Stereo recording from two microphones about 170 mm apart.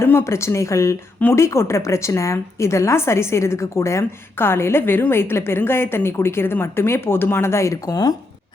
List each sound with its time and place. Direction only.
0.0 s speech: 15° left (ahead or behind)